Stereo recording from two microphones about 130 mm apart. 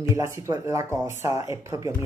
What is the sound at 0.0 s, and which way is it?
Speech, 20° right (ahead or behind).